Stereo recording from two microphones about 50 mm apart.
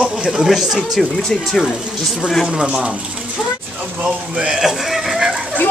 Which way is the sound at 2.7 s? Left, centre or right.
Right.